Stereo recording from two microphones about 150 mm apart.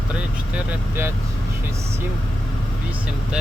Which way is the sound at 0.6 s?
15° right (ahead or behind).